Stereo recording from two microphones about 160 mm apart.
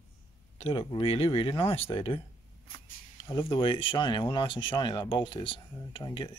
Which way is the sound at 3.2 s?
30° left (ahead or behind).